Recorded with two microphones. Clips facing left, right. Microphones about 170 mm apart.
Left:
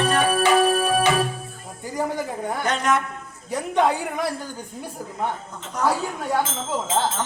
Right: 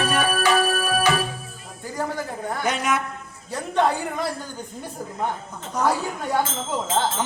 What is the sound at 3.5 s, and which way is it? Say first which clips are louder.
Speech: left 1 dB; 15° left (ahead or behind).